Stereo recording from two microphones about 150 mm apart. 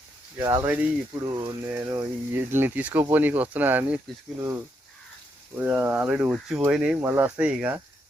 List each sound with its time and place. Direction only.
0.3 s speech: 20° right (ahead or behind)
5.5 s speech: 10° right (ahead or behind)